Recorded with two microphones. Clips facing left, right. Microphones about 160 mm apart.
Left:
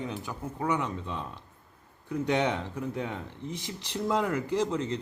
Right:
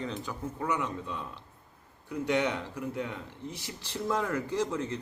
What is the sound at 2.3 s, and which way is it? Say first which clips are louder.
A man's voice: left 1 dB; 20° left (ahead or behind).